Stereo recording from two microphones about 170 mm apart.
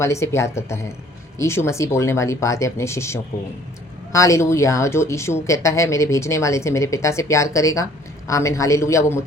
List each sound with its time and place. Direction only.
0.0 s speech: 15° left (ahead or behind)